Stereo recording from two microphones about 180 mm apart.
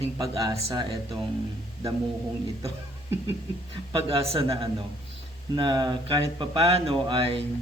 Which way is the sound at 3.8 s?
25° right (ahead or behind).